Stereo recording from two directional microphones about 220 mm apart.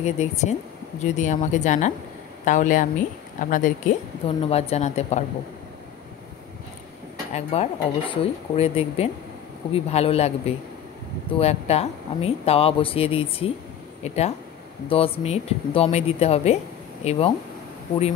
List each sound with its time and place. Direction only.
0.0 s speech: 30° left (ahead or behind)
7.3 s speech: 30° left (ahead or behind)